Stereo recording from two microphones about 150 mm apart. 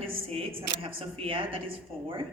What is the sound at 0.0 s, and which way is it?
Speech, 40° right (ahead or behind).